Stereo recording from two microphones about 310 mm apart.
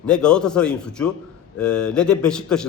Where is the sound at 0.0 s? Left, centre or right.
Centre.